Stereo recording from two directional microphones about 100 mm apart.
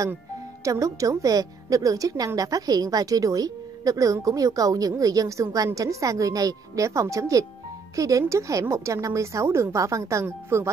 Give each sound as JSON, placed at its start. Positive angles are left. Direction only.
{"t": 0.7, "sound": "a woman's voice", "side_deg": -35}